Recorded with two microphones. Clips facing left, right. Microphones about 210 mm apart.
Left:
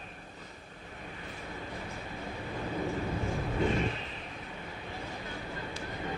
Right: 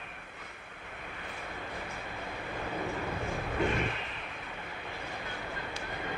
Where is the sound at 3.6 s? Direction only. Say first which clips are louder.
Left 1 dB; 65° right (ahead or behind).